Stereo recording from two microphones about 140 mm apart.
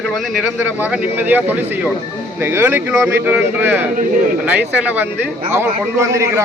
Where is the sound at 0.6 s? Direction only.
15° right (ahead or behind).